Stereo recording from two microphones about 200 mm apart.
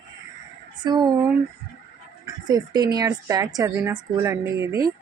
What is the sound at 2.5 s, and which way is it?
Speech, 20° right (ahead or behind).